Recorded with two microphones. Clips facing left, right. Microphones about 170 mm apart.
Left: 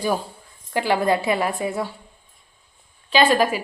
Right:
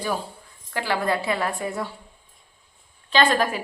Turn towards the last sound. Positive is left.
turn(degrees=5)  # may be behind; listen again after turning